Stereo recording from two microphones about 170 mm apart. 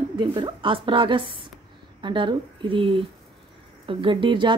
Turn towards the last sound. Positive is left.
turn(degrees=-30)  # may be behind; listen again after turning